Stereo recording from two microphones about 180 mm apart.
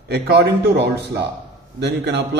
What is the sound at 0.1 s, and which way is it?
A man's voice, 65° right (ahead or behind).